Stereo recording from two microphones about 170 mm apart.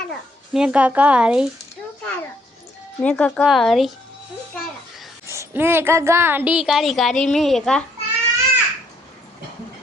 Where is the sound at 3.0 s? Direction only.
10° left (ahead or behind).